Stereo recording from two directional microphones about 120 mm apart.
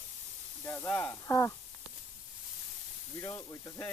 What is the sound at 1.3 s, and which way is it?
Speech, 25° left (ahead or behind).